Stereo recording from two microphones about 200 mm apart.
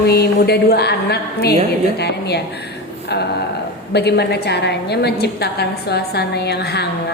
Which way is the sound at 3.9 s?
55° left (ahead or behind).